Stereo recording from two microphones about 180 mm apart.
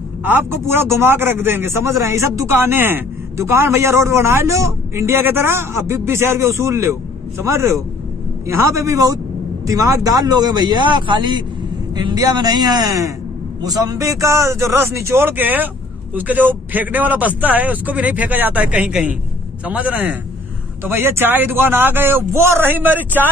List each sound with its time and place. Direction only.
0.2 s a man's voice: 10° right (ahead or behind)